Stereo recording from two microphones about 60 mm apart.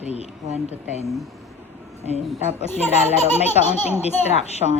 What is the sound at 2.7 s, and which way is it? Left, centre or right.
Speech, left.